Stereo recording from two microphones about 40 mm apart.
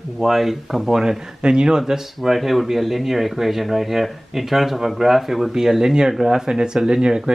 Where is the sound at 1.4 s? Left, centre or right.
Right.